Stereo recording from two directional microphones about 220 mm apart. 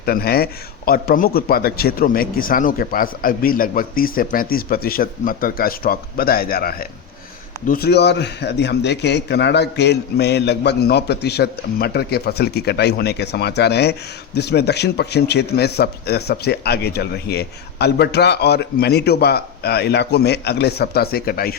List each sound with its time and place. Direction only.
0.0 s a man's voice: 45° left (ahead or behind)